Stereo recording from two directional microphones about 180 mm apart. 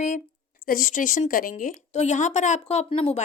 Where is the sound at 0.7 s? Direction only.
45° left (ahead or behind).